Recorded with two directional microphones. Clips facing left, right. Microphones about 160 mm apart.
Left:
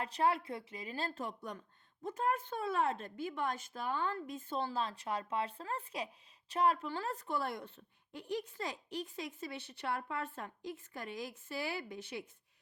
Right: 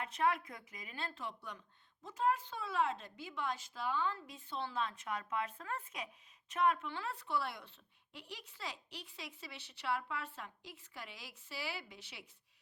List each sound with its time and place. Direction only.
0.0 s a woman's voice: 35° left (ahead or behind); by 12.2 s 50° left (ahead or behind)